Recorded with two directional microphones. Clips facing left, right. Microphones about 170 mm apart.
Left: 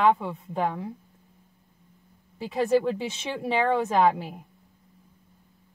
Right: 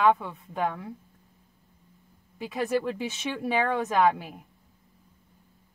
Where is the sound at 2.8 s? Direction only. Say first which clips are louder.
Left 2 dB; 25° left (ahead or behind).